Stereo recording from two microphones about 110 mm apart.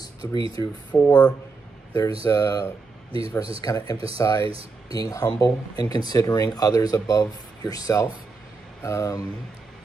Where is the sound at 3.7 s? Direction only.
30° left (ahead or behind).